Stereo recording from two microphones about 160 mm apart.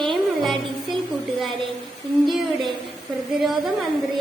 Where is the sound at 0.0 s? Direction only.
Centre (ahead or behind).